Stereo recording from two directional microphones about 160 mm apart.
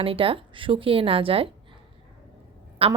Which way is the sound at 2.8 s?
35° right (ahead or behind).